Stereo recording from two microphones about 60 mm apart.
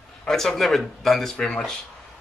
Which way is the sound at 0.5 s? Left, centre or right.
Centre.